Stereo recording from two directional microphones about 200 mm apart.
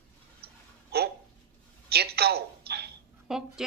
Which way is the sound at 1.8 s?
50° right (ahead or behind).